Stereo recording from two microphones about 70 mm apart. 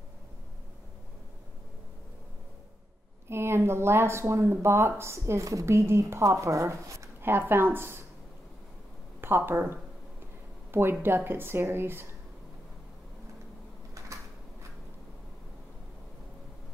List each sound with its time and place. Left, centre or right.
3.3 s speech: right
7.2 s speech: right
9.2 s speech: right
13.9 s a sound: right